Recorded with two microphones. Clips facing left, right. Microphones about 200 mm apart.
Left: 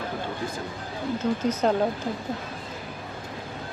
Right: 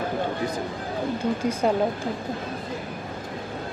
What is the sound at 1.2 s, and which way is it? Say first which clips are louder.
Speech: left 1 dB; 10° right (ahead or behind).